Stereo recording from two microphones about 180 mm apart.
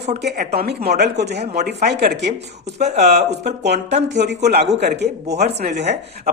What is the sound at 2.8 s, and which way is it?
Speech, 35° right (ahead or behind).